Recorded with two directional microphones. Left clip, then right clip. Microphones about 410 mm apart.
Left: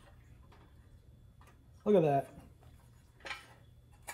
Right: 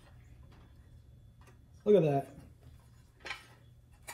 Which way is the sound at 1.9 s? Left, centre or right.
Centre.